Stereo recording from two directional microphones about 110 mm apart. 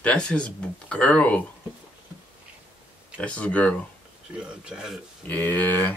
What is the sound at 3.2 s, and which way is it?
Speech, 10° left (ahead or behind).